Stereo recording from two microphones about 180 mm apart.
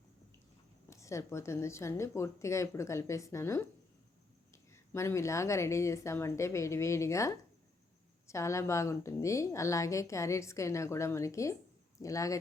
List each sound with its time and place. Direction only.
0.9 s a woman's voice: 15° left (ahead or behind)
4.7 s a woman's voice: 15° left (ahead or behind)